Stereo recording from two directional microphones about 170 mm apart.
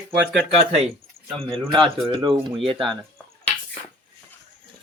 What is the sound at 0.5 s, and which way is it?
Speech, 40° right (ahead or behind).